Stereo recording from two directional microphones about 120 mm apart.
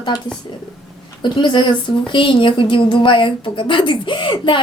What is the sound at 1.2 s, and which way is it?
A woman's voice, 40° left (ahead or behind).